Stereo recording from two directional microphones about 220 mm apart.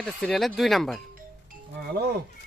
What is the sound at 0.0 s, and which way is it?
Speech, 5° left (ahead or behind).